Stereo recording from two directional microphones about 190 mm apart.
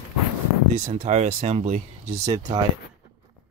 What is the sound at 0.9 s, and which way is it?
Speech, 35° right (ahead or behind).